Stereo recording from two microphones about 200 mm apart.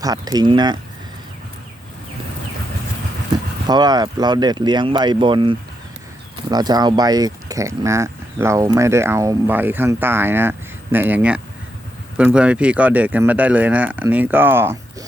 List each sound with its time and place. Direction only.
0.0 s speech: 20° right (ahead or behind)
3.7 s speech: 20° right (ahead or behind)